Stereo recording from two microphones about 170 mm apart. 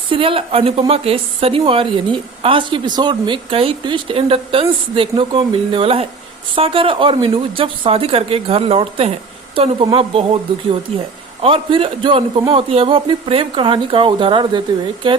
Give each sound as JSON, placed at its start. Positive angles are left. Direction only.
{"t": 0.1, "sound": "speech", "side_deg": -30}